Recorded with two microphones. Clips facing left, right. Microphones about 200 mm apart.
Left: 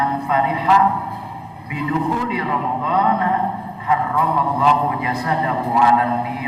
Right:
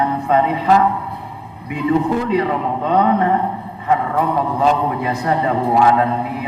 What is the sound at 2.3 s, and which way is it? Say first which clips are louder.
A man's voice: right 5 dB; 45° right (ahead or behind).